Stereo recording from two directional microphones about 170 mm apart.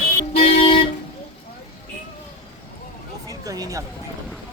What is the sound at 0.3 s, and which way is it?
Music, 30° left (ahead or behind).